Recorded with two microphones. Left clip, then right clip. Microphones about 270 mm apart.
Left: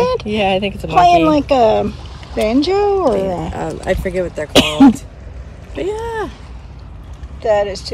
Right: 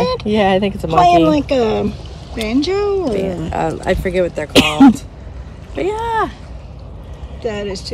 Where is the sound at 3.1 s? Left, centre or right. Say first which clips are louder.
Left 2 dB; centre.